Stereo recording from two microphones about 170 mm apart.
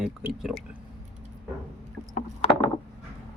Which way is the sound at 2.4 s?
35° left (ahead or behind).